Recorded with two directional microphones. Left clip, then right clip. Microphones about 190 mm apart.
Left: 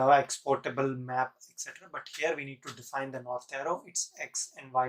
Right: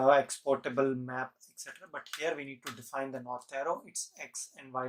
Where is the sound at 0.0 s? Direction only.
35° right (ahead or behind).